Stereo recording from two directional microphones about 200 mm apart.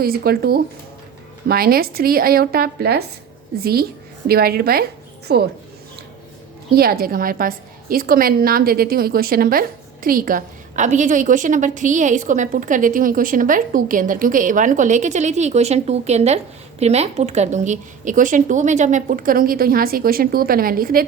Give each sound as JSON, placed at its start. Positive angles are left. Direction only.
{"t": 0.0, "sound": "a woman's voice", "side_deg": -50}
{"t": 6.7, "sound": "a woman's voice", "side_deg": -50}